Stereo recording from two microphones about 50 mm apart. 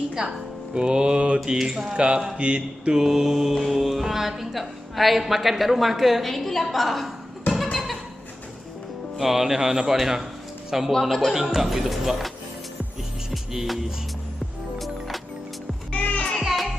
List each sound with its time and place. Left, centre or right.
0.2 s a man's voice: centre
1.4 s a man's voice: centre
3.0 s speech: centre
7.7 s a sound: centre
9.2 s a man's voice: centre
10.9 s a man's voice: centre
13.3 s music: centre
15.9 s music: left
16.3 s music: centre